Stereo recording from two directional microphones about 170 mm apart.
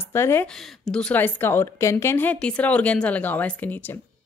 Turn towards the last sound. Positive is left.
turn(degrees=10)  # may be behind; listen again after turning